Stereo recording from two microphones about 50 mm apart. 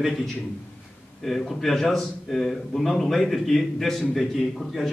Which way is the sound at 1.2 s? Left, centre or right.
Centre.